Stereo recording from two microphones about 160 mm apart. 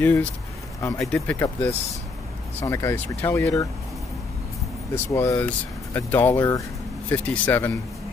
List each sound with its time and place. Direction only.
0.0 s speech: 10° left (ahead or behind)
4.9 s speech: 20° left (ahead or behind)